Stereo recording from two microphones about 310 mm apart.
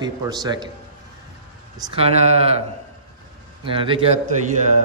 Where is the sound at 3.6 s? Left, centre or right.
Centre.